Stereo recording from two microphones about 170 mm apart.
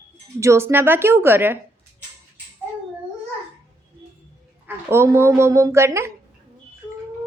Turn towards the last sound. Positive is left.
turn(degrees=-15)  # may be behind; listen again after turning